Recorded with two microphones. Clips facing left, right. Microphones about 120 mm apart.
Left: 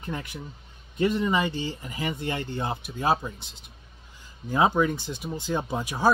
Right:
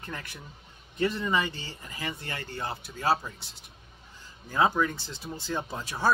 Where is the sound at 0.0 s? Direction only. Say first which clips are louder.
Left 6 dB; 15° left (ahead or behind).